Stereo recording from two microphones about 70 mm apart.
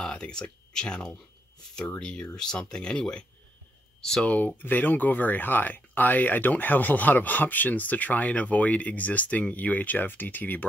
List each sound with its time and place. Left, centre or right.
0.0 s speech: centre
4.4 s speech: left